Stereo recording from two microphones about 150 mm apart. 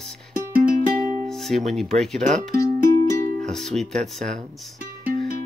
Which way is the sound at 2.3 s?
75° right (ahead or behind).